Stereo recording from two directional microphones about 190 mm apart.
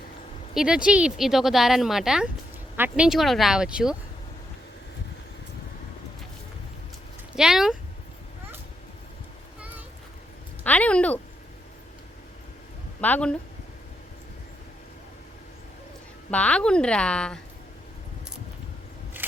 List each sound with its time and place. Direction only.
0.5 s speech: 5° right (ahead or behind)
7.3 s speech: 5° right (ahead or behind)
10.6 s speech: 10° left (ahead or behind)
13.0 s speech: 10° left (ahead or behind)
16.3 s speech: 5° left (ahead or behind)